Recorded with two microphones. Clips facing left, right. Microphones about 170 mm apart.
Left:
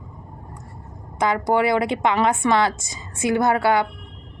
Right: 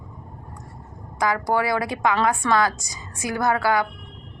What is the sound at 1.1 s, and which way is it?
A woman's voice, 25° left (ahead or behind).